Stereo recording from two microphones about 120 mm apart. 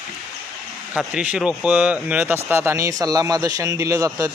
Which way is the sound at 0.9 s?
5° right (ahead or behind).